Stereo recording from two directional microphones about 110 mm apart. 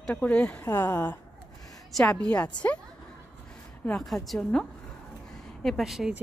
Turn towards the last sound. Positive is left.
turn(degrees=0)  # may be behind; listen again after turning